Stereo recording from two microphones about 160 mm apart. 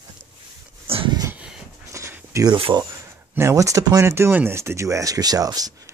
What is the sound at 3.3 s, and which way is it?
Speech, 20° right (ahead or behind).